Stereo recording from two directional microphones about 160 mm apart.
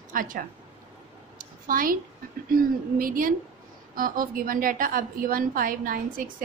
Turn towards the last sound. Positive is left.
turn(degrees=-60)  # may be behind; listen again after turning